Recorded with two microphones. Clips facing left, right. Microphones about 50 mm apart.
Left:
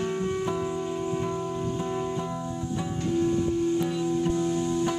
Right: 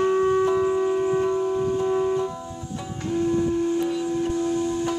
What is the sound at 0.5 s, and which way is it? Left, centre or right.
Music, right.